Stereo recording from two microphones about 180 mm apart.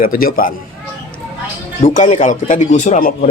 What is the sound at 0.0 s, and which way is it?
Speech, 55° left (ahead or behind).